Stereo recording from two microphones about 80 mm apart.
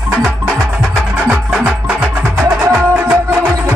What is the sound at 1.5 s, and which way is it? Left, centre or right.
Music, centre.